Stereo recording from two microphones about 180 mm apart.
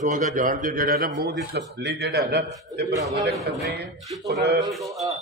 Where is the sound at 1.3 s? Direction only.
75° right (ahead or behind).